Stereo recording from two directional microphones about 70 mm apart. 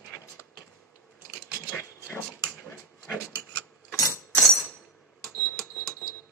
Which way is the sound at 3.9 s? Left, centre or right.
Left.